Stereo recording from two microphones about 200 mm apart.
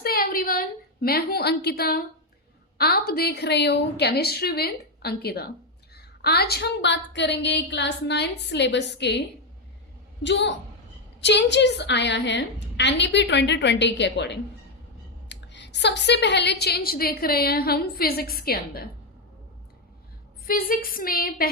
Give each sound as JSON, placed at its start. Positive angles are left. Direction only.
{"t": 0.0, "sound": "a sound", "side_deg": 50}
{"t": 2.7, "sound": "a woman's voice", "side_deg": 50}
{"t": 10.2, "sound": "a woman's voice", "side_deg": 60}
{"t": 20.4, "sound": "a woman's voice", "side_deg": 45}